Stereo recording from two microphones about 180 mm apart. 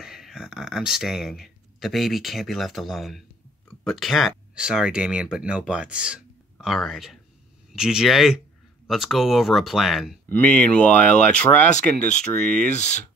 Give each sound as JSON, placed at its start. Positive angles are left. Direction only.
{"t": 0.0, "sound": "speech", "side_deg": -5}
{"t": 12.6, "sound": "speech", "side_deg": 40}